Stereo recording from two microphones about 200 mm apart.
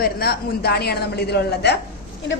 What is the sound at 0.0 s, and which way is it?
A woman's voice, 50° left (ahead or behind).